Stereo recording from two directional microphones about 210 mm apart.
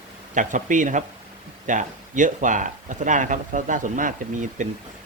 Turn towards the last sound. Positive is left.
turn(degrees=-35)  # may be behind; listen again after turning